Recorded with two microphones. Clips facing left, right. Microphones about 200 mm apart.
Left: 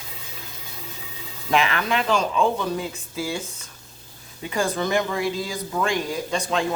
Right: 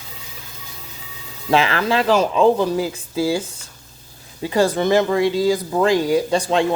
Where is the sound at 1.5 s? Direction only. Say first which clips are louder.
Right 4 dB; 30° right (ahead or behind).